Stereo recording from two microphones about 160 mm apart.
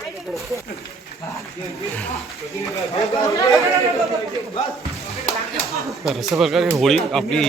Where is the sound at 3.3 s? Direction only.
20° left (ahead or behind).